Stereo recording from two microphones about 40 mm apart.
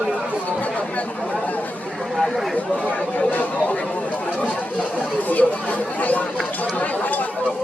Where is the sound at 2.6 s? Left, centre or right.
Left.